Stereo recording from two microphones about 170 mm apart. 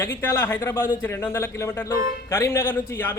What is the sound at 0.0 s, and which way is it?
Speech, 15° left (ahead or behind).